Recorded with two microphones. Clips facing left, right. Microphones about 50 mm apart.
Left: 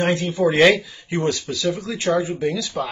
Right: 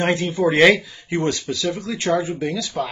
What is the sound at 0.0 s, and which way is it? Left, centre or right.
Speech, centre.